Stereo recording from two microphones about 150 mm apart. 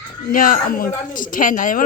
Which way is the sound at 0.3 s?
65° left (ahead or behind).